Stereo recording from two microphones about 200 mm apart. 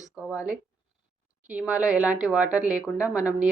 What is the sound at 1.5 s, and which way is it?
A woman's voice, 5° right (ahead or behind).